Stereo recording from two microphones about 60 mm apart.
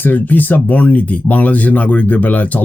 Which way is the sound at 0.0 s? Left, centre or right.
Left.